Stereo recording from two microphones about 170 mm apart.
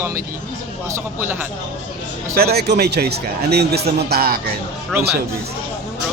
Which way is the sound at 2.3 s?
70° right (ahead or behind).